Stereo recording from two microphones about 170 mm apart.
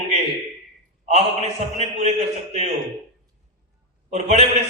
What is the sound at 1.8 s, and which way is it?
Speech, 40° right (ahead or behind).